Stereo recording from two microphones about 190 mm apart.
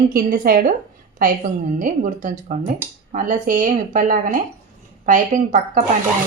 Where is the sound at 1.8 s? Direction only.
45° right (ahead or behind).